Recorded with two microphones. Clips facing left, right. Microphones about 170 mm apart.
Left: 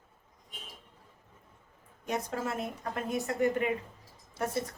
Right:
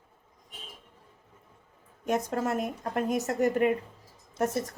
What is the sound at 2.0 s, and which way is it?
Speech, 50° right (ahead or behind).